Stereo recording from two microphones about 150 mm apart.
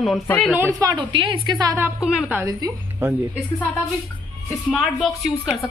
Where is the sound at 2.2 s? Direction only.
10° right (ahead or behind).